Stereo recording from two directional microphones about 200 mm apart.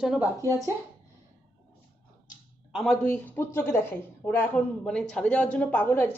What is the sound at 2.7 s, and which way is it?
A woman's voice, centre (ahead or behind).